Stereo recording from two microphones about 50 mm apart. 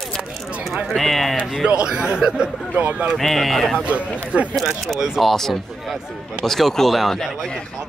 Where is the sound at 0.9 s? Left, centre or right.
Centre.